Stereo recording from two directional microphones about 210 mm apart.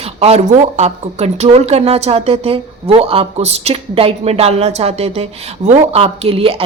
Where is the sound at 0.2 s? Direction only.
30° right (ahead or behind).